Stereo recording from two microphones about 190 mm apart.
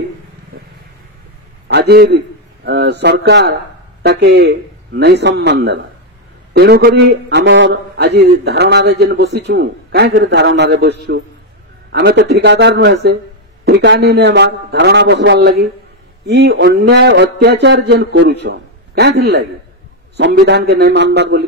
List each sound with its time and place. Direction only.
0.5 s vehicle: 55° right (ahead or behind)
1.7 s a man's voice: 60° right (ahead or behind)